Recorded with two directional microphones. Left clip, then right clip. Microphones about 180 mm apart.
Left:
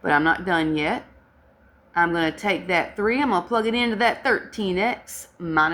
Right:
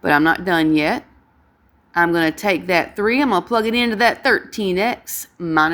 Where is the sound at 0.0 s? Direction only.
45° right (ahead or behind).